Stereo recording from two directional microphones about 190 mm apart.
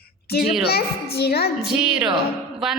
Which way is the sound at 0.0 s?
55° left (ahead or behind).